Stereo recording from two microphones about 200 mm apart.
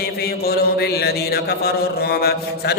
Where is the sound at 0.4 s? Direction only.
50° left (ahead or behind).